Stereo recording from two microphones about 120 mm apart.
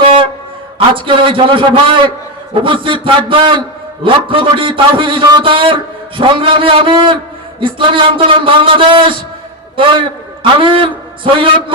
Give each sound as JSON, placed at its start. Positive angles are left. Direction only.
{"t": 0.9, "sound": "a man's voice", "side_deg": -45}